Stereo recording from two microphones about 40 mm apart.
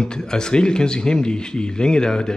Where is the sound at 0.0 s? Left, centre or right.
Centre.